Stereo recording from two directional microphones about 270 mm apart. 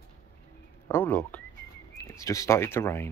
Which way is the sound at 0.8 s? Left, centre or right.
Centre.